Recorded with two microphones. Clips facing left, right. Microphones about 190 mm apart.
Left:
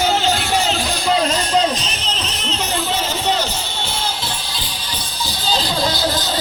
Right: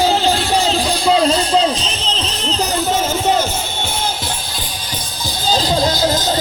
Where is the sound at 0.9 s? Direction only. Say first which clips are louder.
Right 4 dB; 35° right (ahead or behind).